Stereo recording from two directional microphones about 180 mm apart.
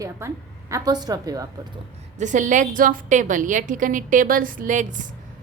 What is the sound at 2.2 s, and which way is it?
A woman's voice, 45° right (ahead or behind).